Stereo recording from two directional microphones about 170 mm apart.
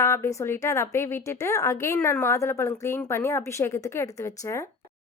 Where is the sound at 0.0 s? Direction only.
15° left (ahead or behind).